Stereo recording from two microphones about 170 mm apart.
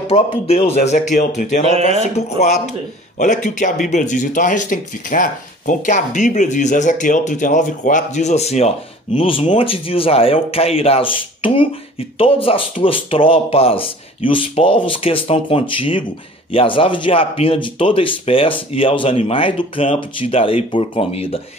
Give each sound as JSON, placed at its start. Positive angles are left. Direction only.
{"t": 0.1, "sound": "a man's voice", "side_deg": 35}